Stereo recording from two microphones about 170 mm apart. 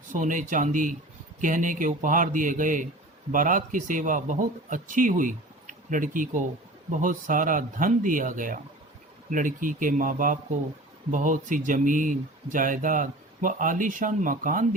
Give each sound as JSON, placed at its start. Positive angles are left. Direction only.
{"t": 0.1, "sound": "speech", "side_deg": -50}